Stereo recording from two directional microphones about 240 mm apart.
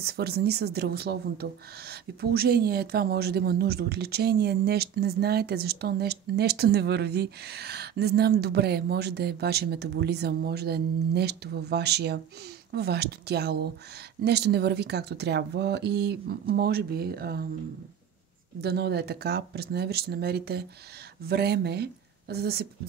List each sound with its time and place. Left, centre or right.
0.0 s speech: right
18.6 s speech: right